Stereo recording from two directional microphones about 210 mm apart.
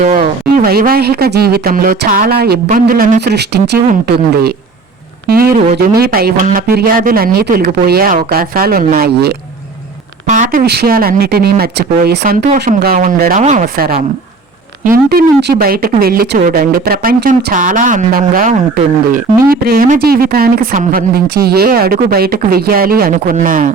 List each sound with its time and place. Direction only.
0.0 s speech: 35° right (ahead or behind)
5.3 s speech: 45° right (ahead or behind)
10.2 s speech: 35° right (ahead or behind)